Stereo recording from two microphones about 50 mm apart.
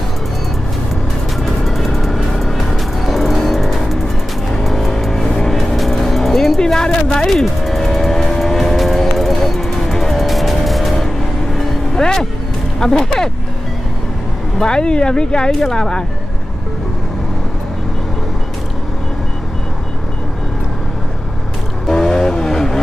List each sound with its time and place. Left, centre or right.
1.4 s music: centre
11.5 s vehicle: centre
12.7 s speech: centre
14.6 s speech: centre
21.8 s vehicle: centre